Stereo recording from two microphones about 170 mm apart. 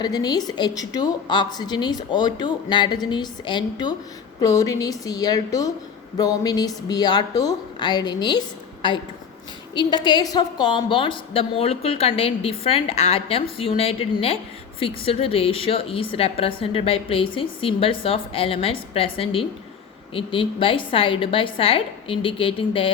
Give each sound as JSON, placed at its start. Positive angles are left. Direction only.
{"t": 0.0, "sound": "a woman's voice", "side_deg": 25}